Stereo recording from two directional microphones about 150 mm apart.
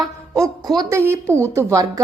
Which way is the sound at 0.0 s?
25° right (ahead or behind).